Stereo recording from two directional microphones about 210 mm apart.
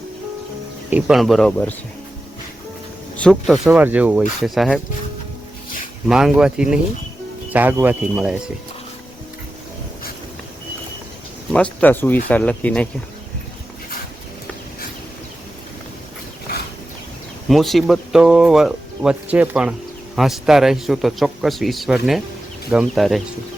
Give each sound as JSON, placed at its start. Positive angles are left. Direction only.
{"t": 0.9, "sound": "speech", "side_deg": -5}
{"t": 3.2, "sound": "speech", "side_deg": 0}
{"t": 6.1, "sound": "speech", "side_deg": -5}
{"t": 11.5, "sound": "speech", "side_deg": 5}
{"t": 17.5, "sound": "speech", "side_deg": 0}